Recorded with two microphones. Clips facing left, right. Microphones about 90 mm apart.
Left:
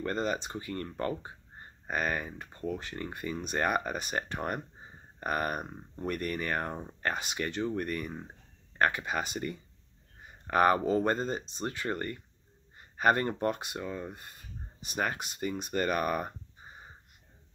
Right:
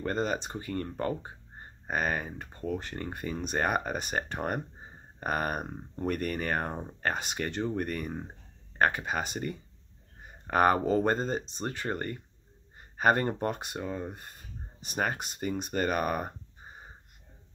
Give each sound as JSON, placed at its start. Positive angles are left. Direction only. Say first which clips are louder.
{"t": 0.0, "sound": "speech", "louder": "right 1 dB", "side_deg": -30}
{"t": 2.3, "sound": "speech", "louder": "right 2 dB", "side_deg": -40}
{"t": 7.1, "sound": "speech", "louder": "right 1 dB", "side_deg": -35}